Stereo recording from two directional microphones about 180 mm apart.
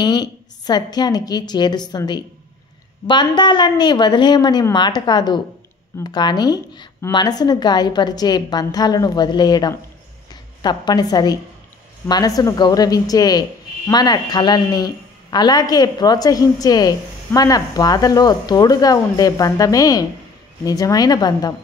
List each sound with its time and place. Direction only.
0.0 s speech: 25° left (ahead or behind)